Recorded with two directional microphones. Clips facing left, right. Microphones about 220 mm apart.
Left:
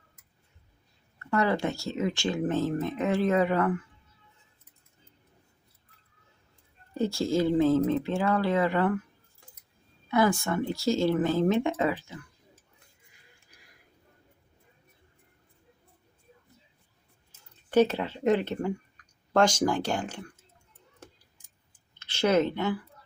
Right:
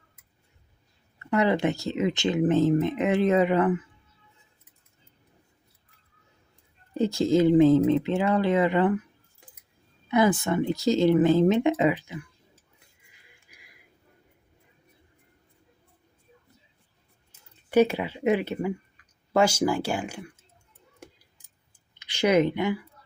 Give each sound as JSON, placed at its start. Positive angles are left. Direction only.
{"t": 1.3, "sound": "speech", "side_deg": -20}
{"t": 6.9, "sound": "speech", "side_deg": -20}
{"t": 10.1, "sound": "speech", "side_deg": -20}
{"t": 13.5, "sound": "a sound", "side_deg": -10}
{"t": 17.7, "sound": "speech", "side_deg": -10}
{"t": 21.0, "sound": "clicking", "side_deg": -10}